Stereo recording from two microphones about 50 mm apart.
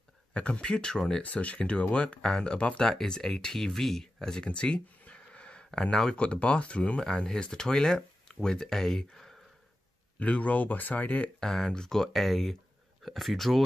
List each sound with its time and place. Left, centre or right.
0.3 s speech: left
1.2 s speech: left
2.9 s speech: centre
4.5 s a sound: left
5.7 s speech: centre
10.1 s speech: left
11.3 s speech: centre